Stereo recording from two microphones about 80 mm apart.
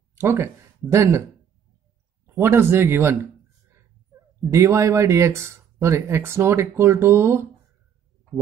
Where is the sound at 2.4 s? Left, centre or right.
Right.